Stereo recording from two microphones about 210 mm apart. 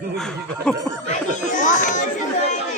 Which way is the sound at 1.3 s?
35° left (ahead or behind).